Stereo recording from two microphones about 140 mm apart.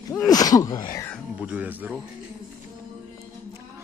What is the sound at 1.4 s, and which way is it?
Speech, 10° right (ahead or behind).